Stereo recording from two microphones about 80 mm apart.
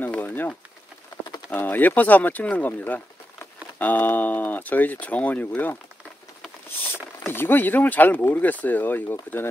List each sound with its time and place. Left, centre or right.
0.0 s speech: left
1.5 s speech: left
7.2 s speech: left